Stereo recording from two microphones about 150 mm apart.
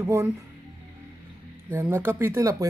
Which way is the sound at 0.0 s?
20° right (ahead or behind).